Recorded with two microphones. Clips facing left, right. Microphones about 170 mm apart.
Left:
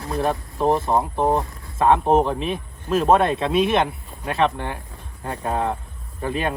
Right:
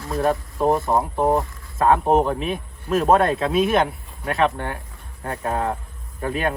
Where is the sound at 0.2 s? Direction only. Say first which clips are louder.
Right 2 dB; centre (ahead or behind).